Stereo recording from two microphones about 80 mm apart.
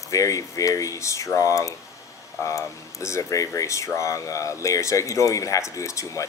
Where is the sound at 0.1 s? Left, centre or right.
Left.